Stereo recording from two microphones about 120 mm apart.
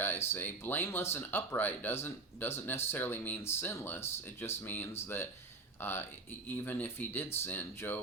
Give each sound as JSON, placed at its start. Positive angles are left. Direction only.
{"t": 0.0, "sound": "speech", "side_deg": 20}